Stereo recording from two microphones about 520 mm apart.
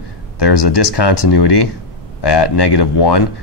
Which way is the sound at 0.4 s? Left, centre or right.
Left.